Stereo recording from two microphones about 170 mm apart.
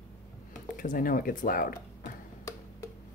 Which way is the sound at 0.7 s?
50° left (ahead or behind).